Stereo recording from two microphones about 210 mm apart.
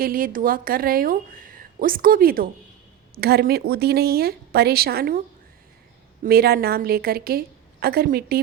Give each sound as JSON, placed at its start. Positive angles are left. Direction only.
{"t": 0.0, "sound": "a woman's voice", "side_deg": -45}
{"t": 6.2, "sound": "a woman's voice", "side_deg": -45}